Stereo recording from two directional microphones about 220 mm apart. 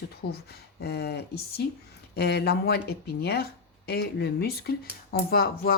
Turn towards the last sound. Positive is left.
turn(degrees=45)  # may be behind; listen again after turning